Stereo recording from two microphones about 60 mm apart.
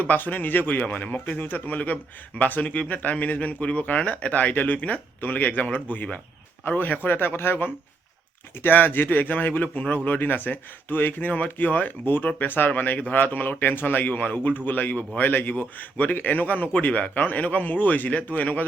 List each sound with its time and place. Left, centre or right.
0.0 s a man's voice: left